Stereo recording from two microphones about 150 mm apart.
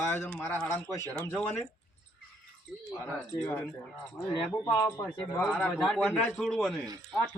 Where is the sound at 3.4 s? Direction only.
15° left (ahead or behind).